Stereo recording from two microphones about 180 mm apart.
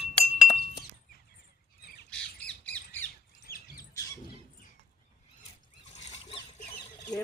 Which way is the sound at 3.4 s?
55° left (ahead or behind).